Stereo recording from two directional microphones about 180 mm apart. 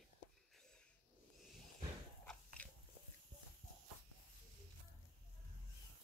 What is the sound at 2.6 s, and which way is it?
Biting, 10° left (ahead or behind).